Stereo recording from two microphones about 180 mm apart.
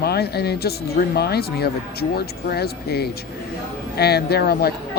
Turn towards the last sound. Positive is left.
turn(degrees=60)  # may be behind; listen again after turning